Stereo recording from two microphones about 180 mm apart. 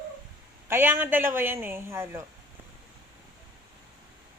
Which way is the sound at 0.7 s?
10° right (ahead or behind).